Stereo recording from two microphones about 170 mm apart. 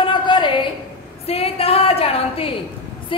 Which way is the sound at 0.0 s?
30° left (ahead or behind).